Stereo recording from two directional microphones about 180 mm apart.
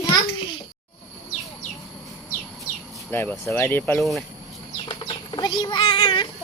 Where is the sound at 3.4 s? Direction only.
15° left (ahead or behind).